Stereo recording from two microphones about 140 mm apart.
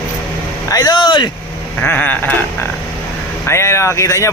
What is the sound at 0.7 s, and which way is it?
Speech, 30° left (ahead or behind).